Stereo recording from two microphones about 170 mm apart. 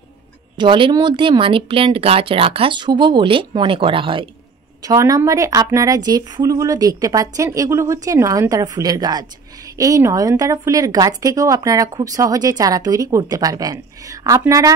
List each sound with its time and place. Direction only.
0.6 s speech: 30° right (ahead or behind)
4.8 s speech: 20° right (ahead or behind)